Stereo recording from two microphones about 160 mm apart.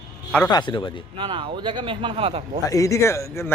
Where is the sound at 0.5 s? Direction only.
30° left (ahead or behind).